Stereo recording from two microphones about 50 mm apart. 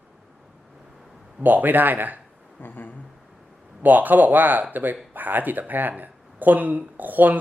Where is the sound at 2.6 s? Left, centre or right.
Left.